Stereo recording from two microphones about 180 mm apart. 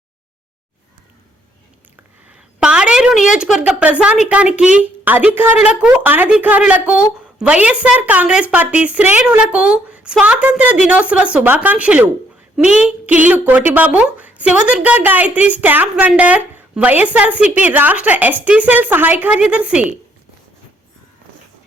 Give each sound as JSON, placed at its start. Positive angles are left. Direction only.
{"t": 2.3, "sound": "a woman's voice", "side_deg": -5}